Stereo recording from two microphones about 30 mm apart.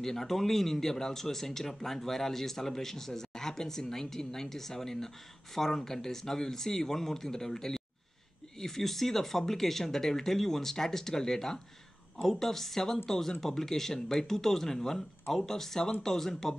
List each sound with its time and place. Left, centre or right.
0.0 s speech: centre